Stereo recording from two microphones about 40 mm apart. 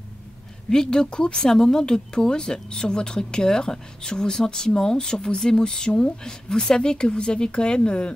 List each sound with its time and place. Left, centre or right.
0.7 s speech: centre